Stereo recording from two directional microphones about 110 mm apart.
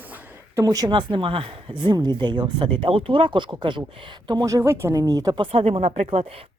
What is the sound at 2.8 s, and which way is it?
Speech, 55° right (ahead or behind).